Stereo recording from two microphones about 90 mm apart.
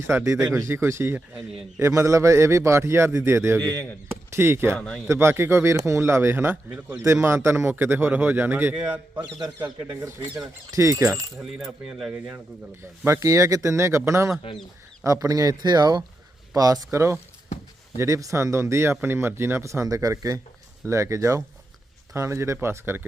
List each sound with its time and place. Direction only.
0.1 s a man's voice: 25° right (ahead or behind)
3.7 s speech: 20° left (ahead or behind)
4.3 s speech: 30° right (ahead or behind)
4.7 s speech: 15° left (ahead or behind)
5.0 s a man's voice: 30° right (ahead or behind)
11.9 s speech: 5° right (ahead or behind)
13.1 s a man's voice: 35° right (ahead or behind)